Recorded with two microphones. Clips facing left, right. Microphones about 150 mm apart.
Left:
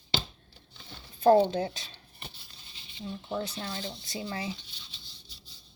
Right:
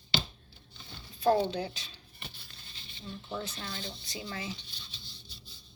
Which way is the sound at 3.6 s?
35° left (ahead or behind).